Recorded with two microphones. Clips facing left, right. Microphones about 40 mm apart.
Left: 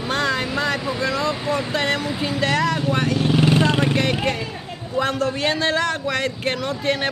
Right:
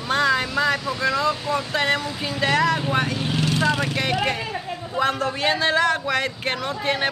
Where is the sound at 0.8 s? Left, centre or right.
Centre.